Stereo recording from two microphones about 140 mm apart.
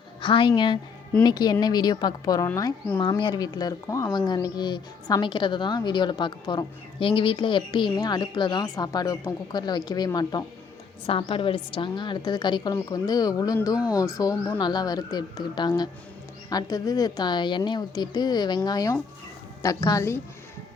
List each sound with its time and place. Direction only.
0.2 s a woman's voice: 35° left (ahead or behind)
11.0 s a woman's voice: 40° left (ahead or behind); by 20.2 s 20° left (ahead or behind)